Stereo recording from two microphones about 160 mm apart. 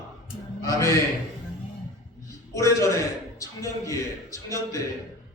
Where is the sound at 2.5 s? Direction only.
20° left (ahead or behind).